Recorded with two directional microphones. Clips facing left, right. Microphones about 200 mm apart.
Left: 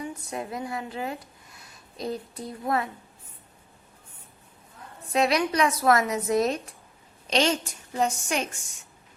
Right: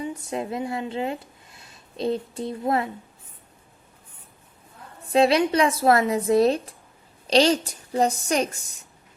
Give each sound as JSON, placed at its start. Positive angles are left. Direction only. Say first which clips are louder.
{"t": 0.0, "sound": "a woman's voice", "louder": "right 4 dB", "side_deg": -25}
{"t": 5.1, "sound": "a woman's voice", "louder": "right 5 dB", "side_deg": -30}